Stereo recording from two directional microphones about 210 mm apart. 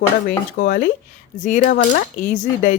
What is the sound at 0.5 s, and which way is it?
Speech, 55° left (ahead or behind).